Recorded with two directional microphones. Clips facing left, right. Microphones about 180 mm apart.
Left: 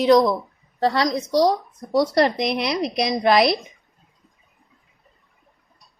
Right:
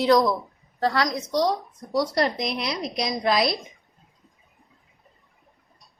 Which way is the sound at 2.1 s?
65° left (ahead or behind).